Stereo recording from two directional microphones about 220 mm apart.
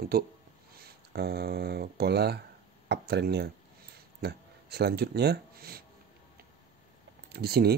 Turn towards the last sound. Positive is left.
turn(degrees=-45)  # may be behind; listen again after turning